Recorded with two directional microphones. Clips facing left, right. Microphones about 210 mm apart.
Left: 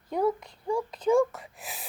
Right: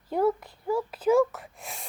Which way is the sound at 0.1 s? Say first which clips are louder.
Right 2 dB; 5° right (ahead or behind).